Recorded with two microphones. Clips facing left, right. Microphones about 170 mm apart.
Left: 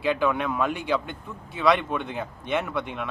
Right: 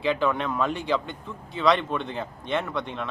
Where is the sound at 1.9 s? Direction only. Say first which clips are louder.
Even; 15° left (ahead or behind).